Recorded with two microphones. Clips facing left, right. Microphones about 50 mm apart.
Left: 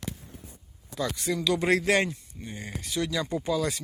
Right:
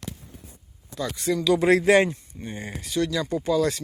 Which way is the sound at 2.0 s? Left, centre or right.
Right.